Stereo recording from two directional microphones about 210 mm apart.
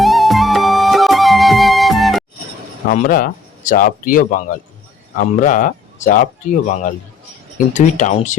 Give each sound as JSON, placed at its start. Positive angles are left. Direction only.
{"t": 0.0, "sound": "music", "side_deg": 0}
{"t": 2.9, "sound": "speech", "side_deg": 40}